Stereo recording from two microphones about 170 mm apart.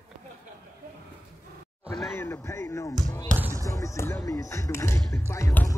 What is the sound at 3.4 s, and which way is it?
Basketball bounce, 15° right (ahead or behind).